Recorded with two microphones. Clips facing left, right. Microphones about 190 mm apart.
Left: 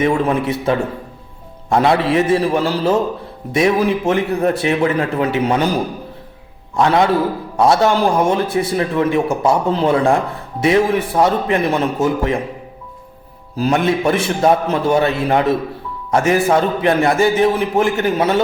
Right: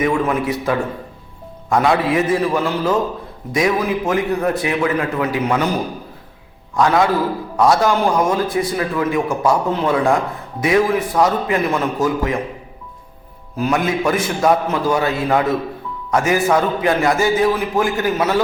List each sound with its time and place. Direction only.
0.0 s a man's voice: 30° left (ahead or behind)
6.7 s a man's voice: 25° left (ahead or behind)
13.6 s a man's voice: 30° left (ahead or behind)